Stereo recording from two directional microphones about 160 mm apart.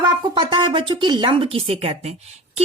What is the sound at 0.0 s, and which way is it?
Speech, 30° right (ahead or behind).